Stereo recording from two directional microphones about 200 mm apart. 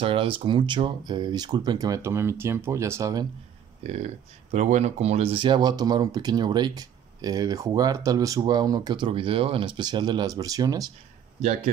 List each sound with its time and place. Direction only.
0.0 s speech: 25° right (ahead or behind)
4.5 s speech: 35° right (ahead or behind); by 10.9 s 20° right (ahead or behind)